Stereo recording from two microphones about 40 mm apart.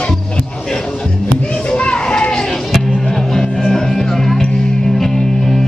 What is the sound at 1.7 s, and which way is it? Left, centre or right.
Music, left.